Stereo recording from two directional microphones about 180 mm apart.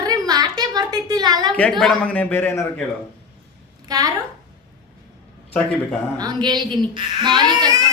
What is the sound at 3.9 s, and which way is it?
Speech, 20° right (ahead or behind).